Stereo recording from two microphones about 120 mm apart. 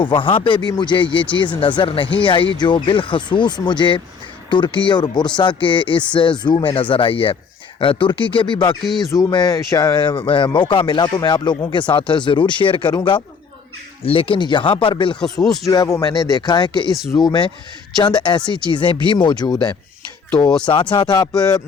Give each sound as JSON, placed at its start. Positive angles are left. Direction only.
{"t": 0.0, "sound": "speech", "side_deg": 45}
{"t": 8.8, "sound": "speech", "side_deg": 0}
{"t": 9.0, "sound": "speech", "side_deg": 30}
{"t": 14.0, "sound": "speech", "side_deg": 50}
{"t": 15.2, "sound": "speech", "side_deg": 5}
{"t": 15.6, "sound": "speech", "side_deg": 30}
{"t": 20.9, "sound": "speech", "side_deg": 40}